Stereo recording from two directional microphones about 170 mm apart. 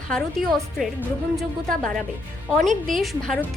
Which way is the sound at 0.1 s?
5° left (ahead or behind).